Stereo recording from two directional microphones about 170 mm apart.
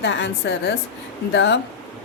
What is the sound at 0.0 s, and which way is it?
Speech, 90° left.